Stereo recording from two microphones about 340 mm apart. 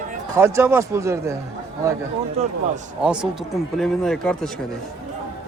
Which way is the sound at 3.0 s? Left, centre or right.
Centre.